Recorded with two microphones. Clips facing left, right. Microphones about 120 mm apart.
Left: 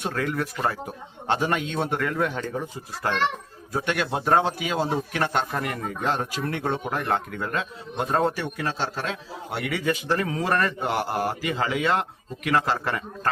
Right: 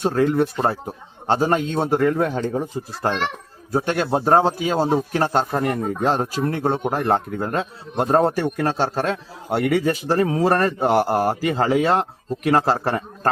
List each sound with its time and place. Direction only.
0.0 s a man's voice: 30° right (ahead or behind)